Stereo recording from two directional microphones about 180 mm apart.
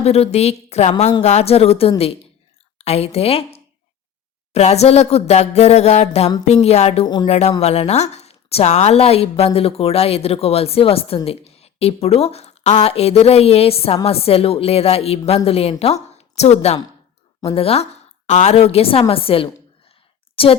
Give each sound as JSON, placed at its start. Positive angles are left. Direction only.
{"t": 0.0, "sound": "a woman's voice", "side_deg": 35}